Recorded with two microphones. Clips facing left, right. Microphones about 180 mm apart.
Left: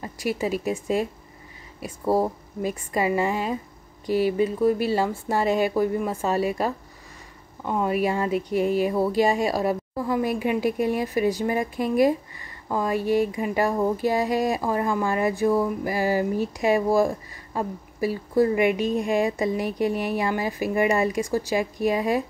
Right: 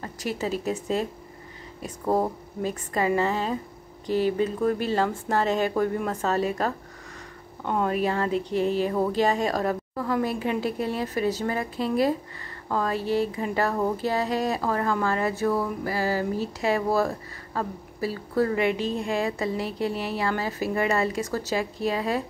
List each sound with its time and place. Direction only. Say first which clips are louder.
0.0 s a woman's voice: left 3 dB; 10° left (ahead or behind)